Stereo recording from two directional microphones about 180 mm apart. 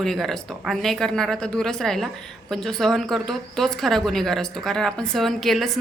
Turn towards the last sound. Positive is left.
turn(degrees=0)  # may be behind; listen again after turning